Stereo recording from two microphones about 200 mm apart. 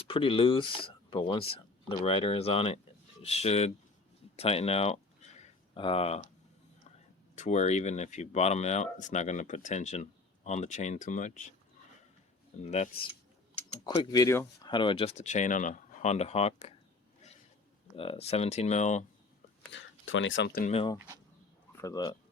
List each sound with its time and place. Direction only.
0.1 s speech: 25° left (ahead or behind)
5.4 s a sound: 25° left (ahead or behind)
7.3 s speech: 35° left (ahead or behind)
12.6 s speech: 35° left (ahead or behind)
13.8 s speech: 20° left (ahead or behind)
17.9 s speech: 30° left (ahead or behind)
19.7 s speech: 70° left (ahead or behind)
20.7 s speech: 25° left (ahead or behind)